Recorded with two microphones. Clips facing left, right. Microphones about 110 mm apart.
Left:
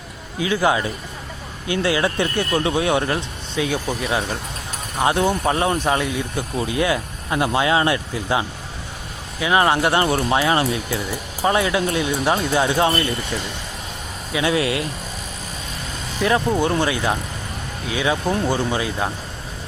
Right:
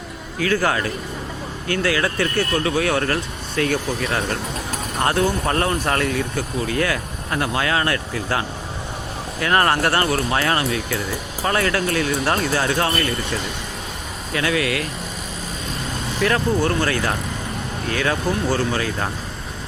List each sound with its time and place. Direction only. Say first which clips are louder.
0.3 s speech: left 1 dB; 15° left (ahead or behind)
10.1 s speech: left 2 dB; 25° left (ahead or behind)
14.4 s speech: left 2 dB; 25° left (ahead or behind)
16.2 s speech: left 1 dB; 20° left (ahead or behind)